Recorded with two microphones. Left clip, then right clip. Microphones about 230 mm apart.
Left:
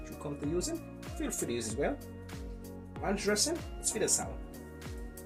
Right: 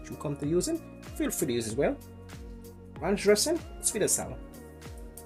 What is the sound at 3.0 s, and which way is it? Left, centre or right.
Speech, right.